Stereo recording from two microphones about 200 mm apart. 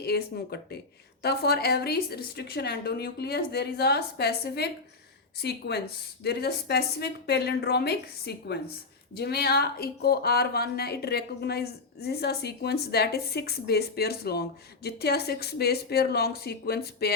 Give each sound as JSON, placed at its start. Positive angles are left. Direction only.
{"t": 0.0, "sound": "a woman's voice", "side_deg": 50}